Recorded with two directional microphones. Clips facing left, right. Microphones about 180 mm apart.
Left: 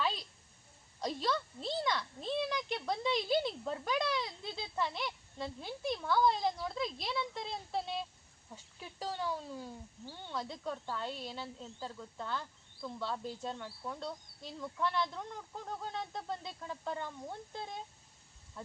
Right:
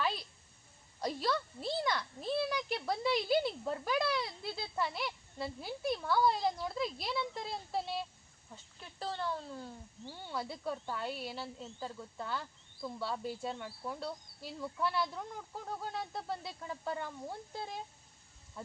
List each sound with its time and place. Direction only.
0.0 s a sound: 5° right (ahead or behind)
1.0 s speech: 5° right (ahead or behind)
8.5 s speech: 10° left (ahead or behind)
10.1 s speech: 5° right (ahead or behind)